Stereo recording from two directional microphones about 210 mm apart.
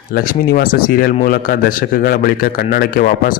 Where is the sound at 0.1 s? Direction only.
45° left (ahead or behind).